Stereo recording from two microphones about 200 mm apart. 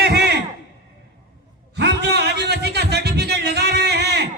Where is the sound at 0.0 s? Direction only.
55° right (ahead or behind).